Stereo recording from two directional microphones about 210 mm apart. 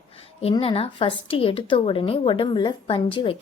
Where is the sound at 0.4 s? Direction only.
25° left (ahead or behind).